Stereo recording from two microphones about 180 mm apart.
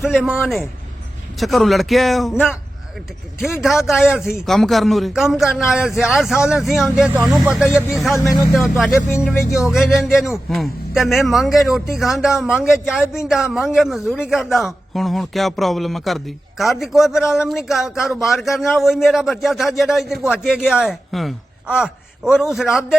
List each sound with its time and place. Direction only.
0.0 s a man's voice: centre (ahead or behind)
3.8 s a man's voice: 5° right (ahead or behind)
9.3 s speech: 15° left (ahead or behind)
9.6 s a man's voice: centre (ahead or behind)